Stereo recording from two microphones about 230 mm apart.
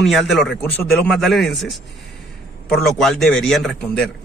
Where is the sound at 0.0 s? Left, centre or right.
Centre.